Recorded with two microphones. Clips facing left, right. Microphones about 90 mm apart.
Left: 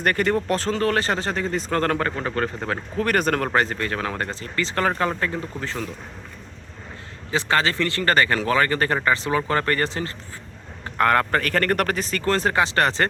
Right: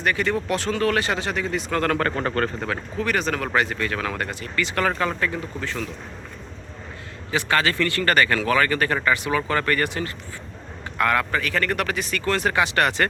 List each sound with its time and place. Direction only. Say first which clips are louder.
0.0 s speech: left 2 dB; 50° left (ahead or behind)
2.1 s a man's voice: right 1 dB; 5° left (ahead or behind)
3.0 s speech: left 3 dB; 50° left (ahead or behind); by 5.9 s 30° left (ahead or behind)
7.3 s speech: even; 30° left (ahead or behind)
10.9 s speech: left 3 dB; 45° left (ahead or behind)